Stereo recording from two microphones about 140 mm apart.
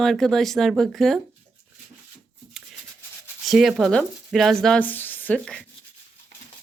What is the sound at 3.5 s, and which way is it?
Speech, centre (ahead or behind).